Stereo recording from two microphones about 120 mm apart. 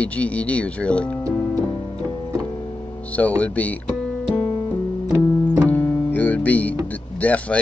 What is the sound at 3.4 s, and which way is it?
Speech, 10° left (ahead or behind).